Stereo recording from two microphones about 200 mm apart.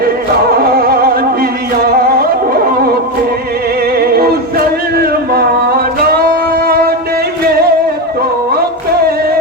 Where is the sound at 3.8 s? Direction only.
50° right (ahead or behind).